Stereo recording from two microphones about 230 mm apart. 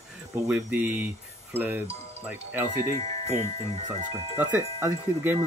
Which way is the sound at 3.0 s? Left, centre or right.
Right.